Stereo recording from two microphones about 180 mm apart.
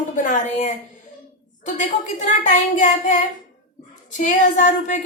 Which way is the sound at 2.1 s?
45° left (ahead or behind).